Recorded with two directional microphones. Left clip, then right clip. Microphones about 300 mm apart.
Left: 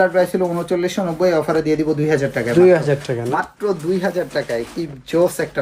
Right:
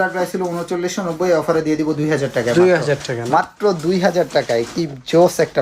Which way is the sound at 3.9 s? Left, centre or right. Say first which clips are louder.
Right 4 dB; right.